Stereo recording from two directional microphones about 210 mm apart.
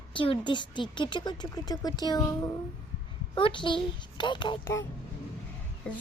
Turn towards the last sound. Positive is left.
turn(degrees=5)  # may be behind; listen again after turning